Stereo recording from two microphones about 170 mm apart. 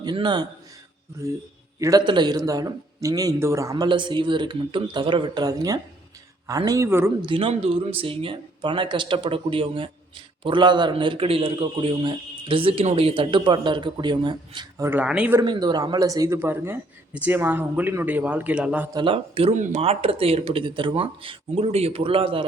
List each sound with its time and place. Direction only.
0.0 s speech: 25° right (ahead or behind)
1.8 s a man's voice: 25° right (ahead or behind)
7.2 s speech: 30° right (ahead or behind)
14.8 s a man's voice: 5° right (ahead or behind)
15.4 s a man's voice: 25° right (ahead or behind); by 18.9 s 5° right (ahead or behind)
18.9 s speech: 30° right (ahead or behind)
19.5 s speech: 45° right (ahead or behind)